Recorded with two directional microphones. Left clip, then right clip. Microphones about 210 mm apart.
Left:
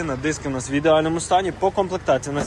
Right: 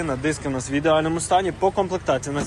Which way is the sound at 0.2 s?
15° left (ahead or behind).